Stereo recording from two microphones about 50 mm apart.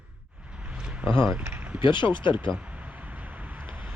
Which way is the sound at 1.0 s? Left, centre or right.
Right.